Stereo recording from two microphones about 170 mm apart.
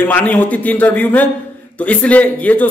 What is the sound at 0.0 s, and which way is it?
A man's voice, 10° left (ahead or behind).